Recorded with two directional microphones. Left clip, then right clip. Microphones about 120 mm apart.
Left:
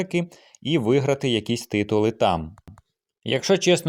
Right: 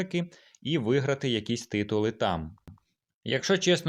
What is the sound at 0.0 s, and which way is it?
Speech, 45° left (ahead or behind).